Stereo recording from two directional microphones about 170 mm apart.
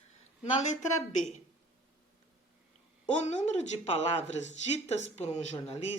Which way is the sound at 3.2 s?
40° left (ahead or behind).